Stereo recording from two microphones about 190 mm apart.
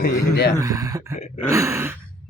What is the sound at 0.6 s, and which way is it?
Speech, 15° right (ahead or behind).